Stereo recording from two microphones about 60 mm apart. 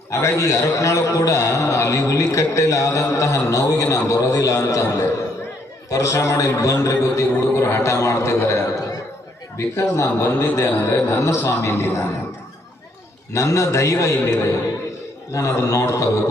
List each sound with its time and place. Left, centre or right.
0.1 s a man's voice: left
13.3 s a man's voice: left